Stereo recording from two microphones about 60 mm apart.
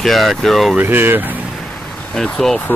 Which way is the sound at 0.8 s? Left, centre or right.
Right.